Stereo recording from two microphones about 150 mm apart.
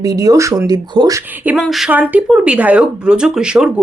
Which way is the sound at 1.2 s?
10° right (ahead or behind).